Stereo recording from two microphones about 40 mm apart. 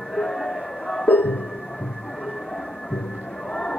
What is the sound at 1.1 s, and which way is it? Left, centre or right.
Music, left.